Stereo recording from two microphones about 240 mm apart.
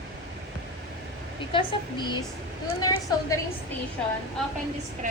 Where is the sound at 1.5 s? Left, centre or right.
Centre.